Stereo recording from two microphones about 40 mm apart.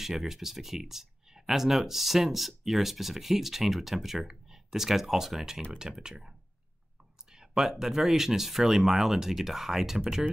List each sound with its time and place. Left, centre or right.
0.0 s speech: centre
7.3 s a sound: centre
7.8 s speech: centre